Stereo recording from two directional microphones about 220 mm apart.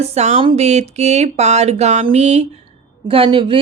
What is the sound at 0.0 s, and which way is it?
Speech, 30° right (ahead or behind).